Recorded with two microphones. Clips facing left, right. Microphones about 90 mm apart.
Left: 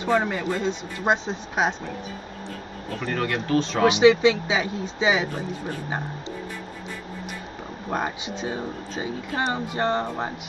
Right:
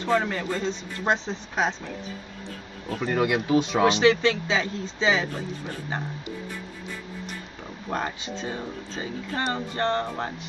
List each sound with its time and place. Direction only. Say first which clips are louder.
0.0 s speech: left 2 dB; 15° left (ahead or behind)
3.1 s speech: right 2 dB; 15° right (ahead or behind)
3.8 s speech: left 6 dB; 15° left (ahead or behind)
7.9 s speech: left 2 dB; 15° left (ahead or behind)